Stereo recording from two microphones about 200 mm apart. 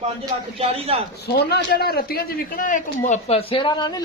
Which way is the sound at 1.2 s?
55° left (ahead or behind).